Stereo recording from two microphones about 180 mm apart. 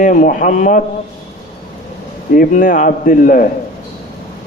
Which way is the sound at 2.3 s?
50° left (ahead or behind).